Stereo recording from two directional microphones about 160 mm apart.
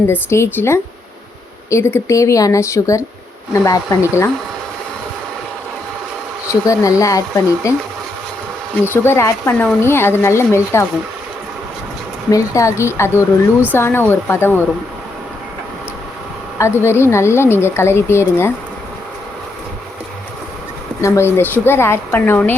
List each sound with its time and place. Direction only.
0.1 s a woman's voice: 15° left (ahead or behind)
6.5 s a woman's voice: 20° left (ahead or behind)
8.9 s a woman's voice: 15° left (ahead or behind)
12.3 s a woman's voice: 20° left (ahead or behind)
16.6 s a woman's voice: 15° left (ahead or behind)
21.0 s a woman's voice: 15° left (ahead or behind)